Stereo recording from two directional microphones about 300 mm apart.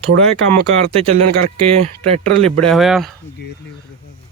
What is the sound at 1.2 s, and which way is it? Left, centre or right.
Speech, right.